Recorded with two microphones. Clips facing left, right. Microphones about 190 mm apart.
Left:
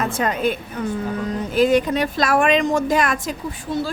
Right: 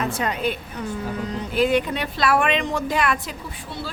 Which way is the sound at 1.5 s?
40° left (ahead or behind).